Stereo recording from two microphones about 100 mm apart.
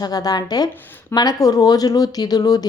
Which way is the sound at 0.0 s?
40° left (ahead or behind).